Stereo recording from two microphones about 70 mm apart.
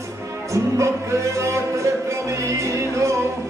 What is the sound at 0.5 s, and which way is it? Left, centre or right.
Music, right.